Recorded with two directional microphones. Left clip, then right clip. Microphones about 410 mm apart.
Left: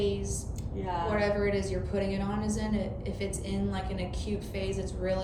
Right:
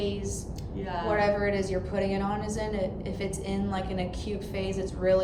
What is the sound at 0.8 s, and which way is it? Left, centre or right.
Speech, centre.